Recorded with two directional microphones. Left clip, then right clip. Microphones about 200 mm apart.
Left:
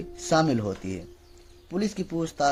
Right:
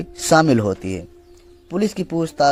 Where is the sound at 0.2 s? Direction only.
45° right (ahead or behind).